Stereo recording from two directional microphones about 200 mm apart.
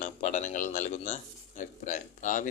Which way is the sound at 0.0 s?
35° left (ahead or behind).